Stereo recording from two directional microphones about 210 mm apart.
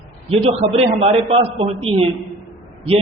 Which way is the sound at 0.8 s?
30° right (ahead or behind).